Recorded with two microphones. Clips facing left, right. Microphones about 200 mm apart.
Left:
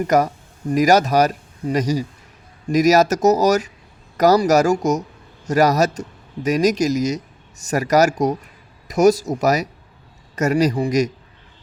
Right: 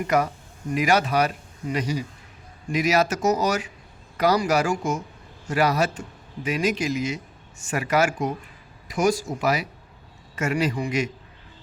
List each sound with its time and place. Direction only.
0.1 s speech: 40° left (ahead or behind)